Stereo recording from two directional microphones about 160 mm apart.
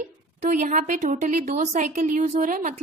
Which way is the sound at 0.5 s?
50° right (ahead or behind).